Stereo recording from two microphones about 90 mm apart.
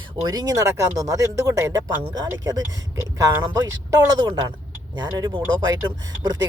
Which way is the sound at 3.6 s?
45° right (ahead or behind).